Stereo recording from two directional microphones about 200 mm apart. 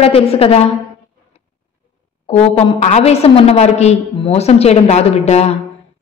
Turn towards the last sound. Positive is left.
turn(degrees=35)  # may be behind; listen again after turning